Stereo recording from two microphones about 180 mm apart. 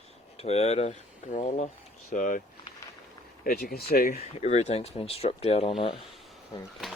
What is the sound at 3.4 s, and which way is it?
Speech, 60° left (ahead or behind).